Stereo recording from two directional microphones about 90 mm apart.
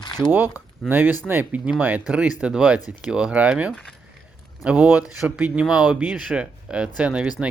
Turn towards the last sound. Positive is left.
turn(degrees=-10)  # may be behind; listen again after turning